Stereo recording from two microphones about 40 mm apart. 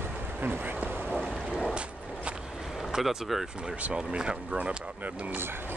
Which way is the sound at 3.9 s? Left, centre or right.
Right.